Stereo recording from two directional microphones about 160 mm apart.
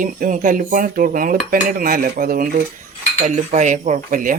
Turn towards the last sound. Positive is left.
turn(degrees=-55)  # may be behind; listen again after turning